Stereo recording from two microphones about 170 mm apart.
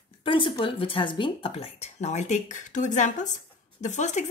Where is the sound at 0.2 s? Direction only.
30° left (ahead or behind).